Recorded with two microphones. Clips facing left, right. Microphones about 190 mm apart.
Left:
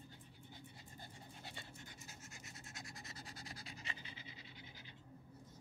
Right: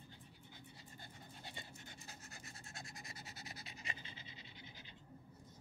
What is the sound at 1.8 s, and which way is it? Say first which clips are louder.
Pant: right 1 dB; 35° right (ahead or behind).